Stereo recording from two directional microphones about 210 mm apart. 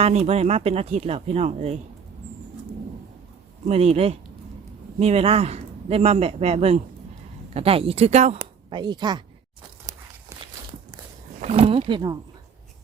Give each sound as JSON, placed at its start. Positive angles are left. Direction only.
{"t": 0.0, "sound": "a man's voice", "side_deg": -30}
{"t": 3.7, "sound": "a man's voice", "side_deg": -30}
{"t": 8.4, "sound": "a woman's voice", "side_deg": -20}
{"t": 9.8, "sound": "walk", "side_deg": -15}
{"t": 11.3, "sound": "speech", "side_deg": -30}